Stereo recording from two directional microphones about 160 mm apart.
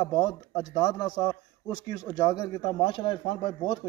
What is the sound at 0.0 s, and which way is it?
A man's voice, 25° left (ahead or behind).